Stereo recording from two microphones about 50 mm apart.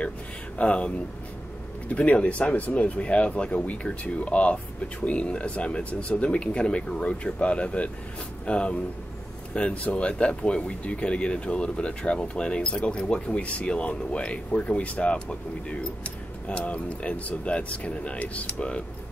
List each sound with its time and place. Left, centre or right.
0.6 s speech: left